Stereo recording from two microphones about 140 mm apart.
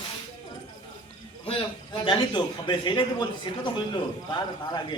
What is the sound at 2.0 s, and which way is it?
A man's voice, 35° left (ahead or behind).